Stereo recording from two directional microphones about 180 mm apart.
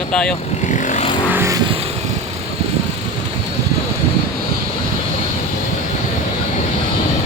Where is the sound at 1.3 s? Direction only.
15° right (ahead or behind).